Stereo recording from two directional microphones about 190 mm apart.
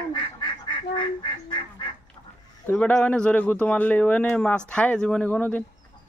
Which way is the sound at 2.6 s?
10° left (ahead or behind).